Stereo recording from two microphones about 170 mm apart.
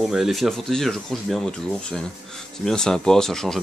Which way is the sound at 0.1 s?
Centre (ahead or behind).